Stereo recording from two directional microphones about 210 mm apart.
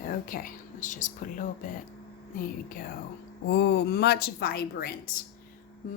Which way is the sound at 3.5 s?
55° left (ahead or behind).